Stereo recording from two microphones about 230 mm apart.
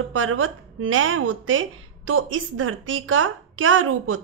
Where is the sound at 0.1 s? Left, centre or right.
Right.